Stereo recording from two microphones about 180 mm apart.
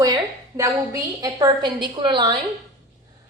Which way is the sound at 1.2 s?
20° right (ahead or behind).